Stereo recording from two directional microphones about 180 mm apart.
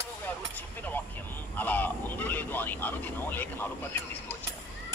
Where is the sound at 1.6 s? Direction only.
10° left (ahead or behind).